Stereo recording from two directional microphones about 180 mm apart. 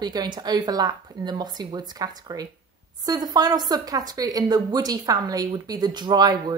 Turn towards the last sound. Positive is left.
turn(degrees=-20)  # may be behind; listen again after turning